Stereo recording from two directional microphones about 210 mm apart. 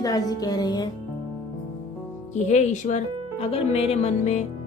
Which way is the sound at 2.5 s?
35° left (ahead or behind).